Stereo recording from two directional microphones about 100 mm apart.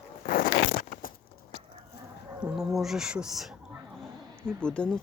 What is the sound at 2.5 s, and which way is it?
Speech, 5° right (ahead or behind).